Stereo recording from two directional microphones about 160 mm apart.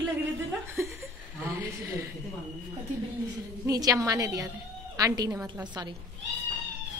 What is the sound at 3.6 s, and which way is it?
A woman's voice, 20° right (ahead or behind).